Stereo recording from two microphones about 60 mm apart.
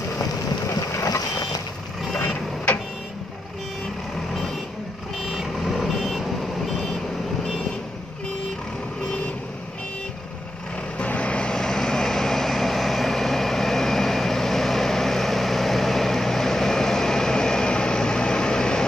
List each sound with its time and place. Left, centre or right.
0.2 s vehicle: left
5.2 s vehicle: centre
11.0 s vehicle: left